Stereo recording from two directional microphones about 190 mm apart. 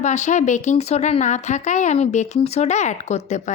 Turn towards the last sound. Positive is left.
turn(degrees=35)  # may be behind; listen again after turning